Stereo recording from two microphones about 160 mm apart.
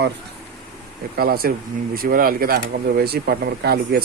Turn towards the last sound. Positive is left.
turn(degrees=-75)  # may be behind; listen again after turning